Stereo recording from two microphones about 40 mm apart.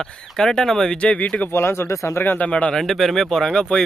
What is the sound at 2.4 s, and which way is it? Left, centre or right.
Speech, left.